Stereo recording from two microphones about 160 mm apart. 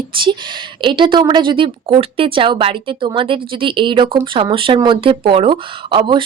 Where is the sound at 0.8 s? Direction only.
30° right (ahead or behind).